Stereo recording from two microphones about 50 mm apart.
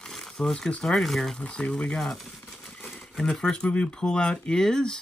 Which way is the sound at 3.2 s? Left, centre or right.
Centre.